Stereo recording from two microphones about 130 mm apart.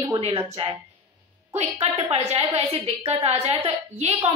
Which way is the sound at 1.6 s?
55° right (ahead or behind).